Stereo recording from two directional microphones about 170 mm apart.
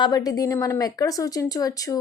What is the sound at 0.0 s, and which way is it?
A woman's voice, 20° left (ahead or behind).